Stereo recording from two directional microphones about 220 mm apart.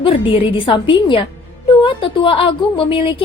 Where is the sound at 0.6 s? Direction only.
20° left (ahead or behind).